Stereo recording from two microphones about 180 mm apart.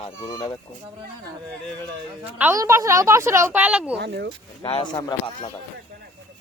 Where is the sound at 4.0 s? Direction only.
70° right (ahead or behind).